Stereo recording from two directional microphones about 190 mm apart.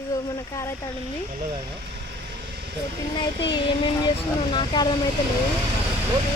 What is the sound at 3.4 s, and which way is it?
Speech, 25° left (ahead or behind).